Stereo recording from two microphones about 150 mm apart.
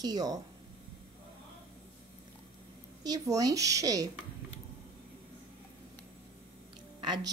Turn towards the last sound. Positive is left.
turn(degrees=-30)  # may be behind; listen again after turning